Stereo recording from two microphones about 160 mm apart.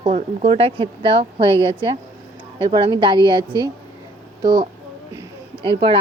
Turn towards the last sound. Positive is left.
turn(degrees=-35)  # may be behind; listen again after turning